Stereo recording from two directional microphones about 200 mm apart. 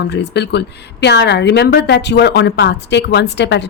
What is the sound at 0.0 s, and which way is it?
A woman's voice, 55° left (ahead or behind).